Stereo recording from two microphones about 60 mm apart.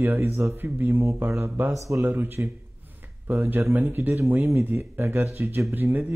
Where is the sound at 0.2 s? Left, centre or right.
Right.